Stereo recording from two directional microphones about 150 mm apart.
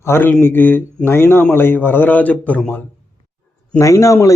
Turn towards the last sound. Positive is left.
turn(degrees=20)  # may be behind; listen again after turning